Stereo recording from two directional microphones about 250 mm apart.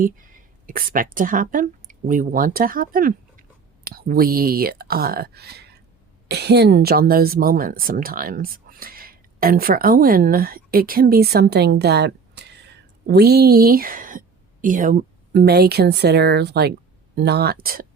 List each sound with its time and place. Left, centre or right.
0.0 s a woman's voice: right